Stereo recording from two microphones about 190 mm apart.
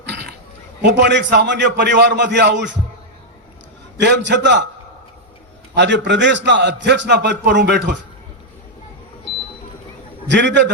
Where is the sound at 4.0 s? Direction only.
65° right (ahead or behind).